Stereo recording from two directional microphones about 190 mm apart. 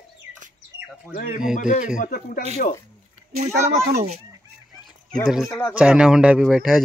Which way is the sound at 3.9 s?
35° right (ahead or behind).